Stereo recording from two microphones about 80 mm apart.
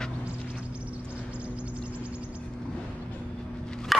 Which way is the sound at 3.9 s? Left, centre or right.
Centre.